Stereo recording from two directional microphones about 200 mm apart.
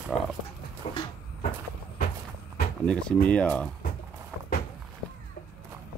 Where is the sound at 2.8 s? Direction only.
5° left (ahead or behind).